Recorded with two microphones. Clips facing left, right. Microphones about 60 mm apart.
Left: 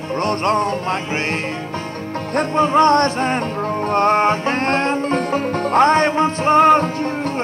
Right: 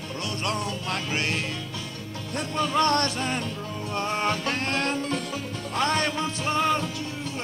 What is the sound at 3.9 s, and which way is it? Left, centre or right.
Music, left.